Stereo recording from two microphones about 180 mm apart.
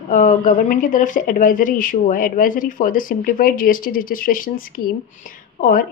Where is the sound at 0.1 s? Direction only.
45° left (ahead or behind).